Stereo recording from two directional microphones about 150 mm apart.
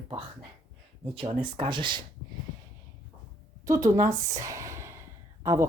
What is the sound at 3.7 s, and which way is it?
Speech, 20° right (ahead or behind).